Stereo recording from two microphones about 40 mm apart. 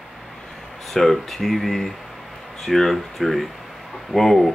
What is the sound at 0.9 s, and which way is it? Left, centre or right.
Speech, centre.